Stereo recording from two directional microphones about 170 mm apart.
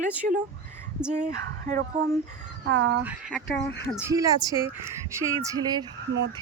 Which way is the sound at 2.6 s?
90° right.